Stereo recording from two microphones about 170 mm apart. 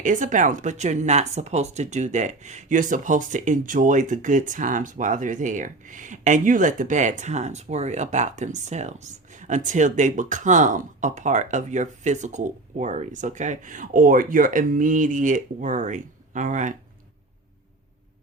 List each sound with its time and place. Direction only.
0.0 s speech: 50° right (ahead or behind)